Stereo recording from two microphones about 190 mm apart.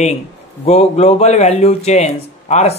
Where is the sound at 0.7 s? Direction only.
35° left (ahead or behind).